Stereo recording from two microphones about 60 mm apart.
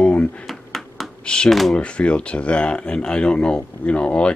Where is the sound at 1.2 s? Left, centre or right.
Centre.